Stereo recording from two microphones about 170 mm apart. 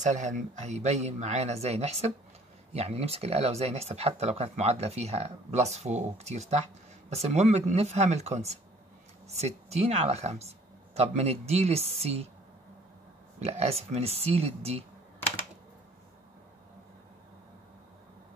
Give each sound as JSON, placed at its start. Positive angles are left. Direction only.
{"t": 0.0, "sound": "speech", "side_deg": -45}
{"t": 13.4, "sound": "speech", "side_deg": -35}